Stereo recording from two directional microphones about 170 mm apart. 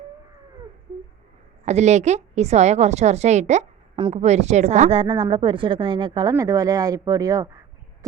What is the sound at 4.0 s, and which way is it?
Speech, 30° right (ahead or behind).